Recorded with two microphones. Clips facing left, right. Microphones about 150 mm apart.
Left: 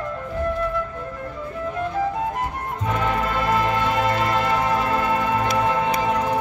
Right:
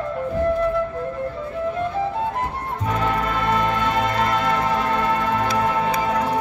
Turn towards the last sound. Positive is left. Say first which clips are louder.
# even
turn(degrees=5)  # may be behind; listen again after turning